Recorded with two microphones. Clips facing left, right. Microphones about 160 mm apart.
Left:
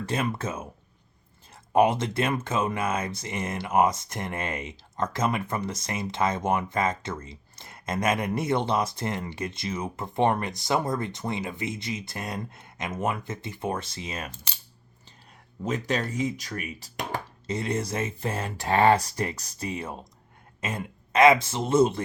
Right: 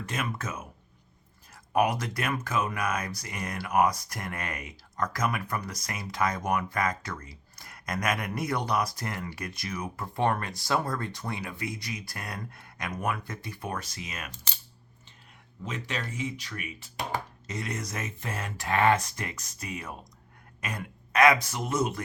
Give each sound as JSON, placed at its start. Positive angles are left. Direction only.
{"t": 0.0, "sound": "speech", "side_deg": 30}
{"t": 1.7, "sound": "speech", "side_deg": 25}
{"t": 15.6, "sound": "speech", "side_deg": 40}
{"t": 17.4, "sound": "speech", "side_deg": 30}